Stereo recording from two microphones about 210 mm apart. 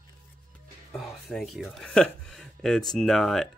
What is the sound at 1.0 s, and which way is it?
Speech, centre (ahead or behind).